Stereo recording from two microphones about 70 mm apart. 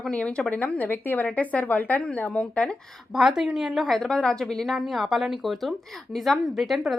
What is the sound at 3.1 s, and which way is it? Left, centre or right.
A woman's voice, centre.